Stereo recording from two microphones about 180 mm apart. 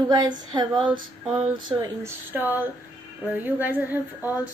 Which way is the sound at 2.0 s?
10° right (ahead or behind).